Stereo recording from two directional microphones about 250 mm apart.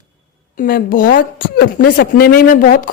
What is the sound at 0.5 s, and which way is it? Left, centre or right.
Speech, left.